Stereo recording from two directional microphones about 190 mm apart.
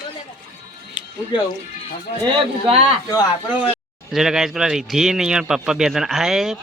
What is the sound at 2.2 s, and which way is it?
Speech, 25° right (ahead or behind).